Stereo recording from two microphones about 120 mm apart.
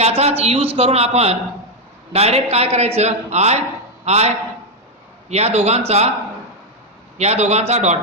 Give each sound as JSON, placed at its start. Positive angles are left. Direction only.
{"t": 0.0, "sound": "a man's voice", "side_deg": -60}
{"t": 5.3, "sound": "a man's voice", "side_deg": -60}
{"t": 7.2, "sound": "a man's voice", "side_deg": -65}